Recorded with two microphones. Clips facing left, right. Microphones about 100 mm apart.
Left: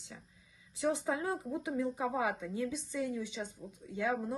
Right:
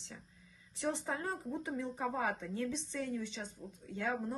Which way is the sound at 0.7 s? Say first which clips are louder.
Left 4 dB; 10° left (ahead or behind).